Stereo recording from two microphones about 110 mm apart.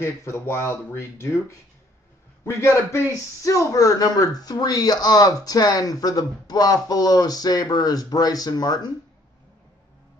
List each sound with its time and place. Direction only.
0.0 s speech: 25° left (ahead or behind)